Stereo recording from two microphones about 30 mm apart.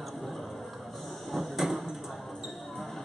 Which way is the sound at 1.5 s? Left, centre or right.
Centre.